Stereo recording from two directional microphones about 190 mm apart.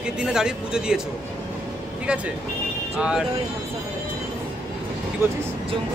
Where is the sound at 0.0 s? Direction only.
5° right (ahead or behind).